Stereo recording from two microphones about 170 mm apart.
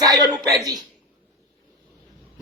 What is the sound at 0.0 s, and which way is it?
Speech, 25° right (ahead or behind).